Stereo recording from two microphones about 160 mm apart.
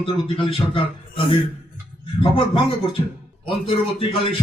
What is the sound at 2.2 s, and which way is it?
Speech, 35° left (ahead or behind).